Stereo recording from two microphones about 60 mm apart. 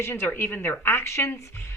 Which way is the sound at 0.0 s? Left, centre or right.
Left.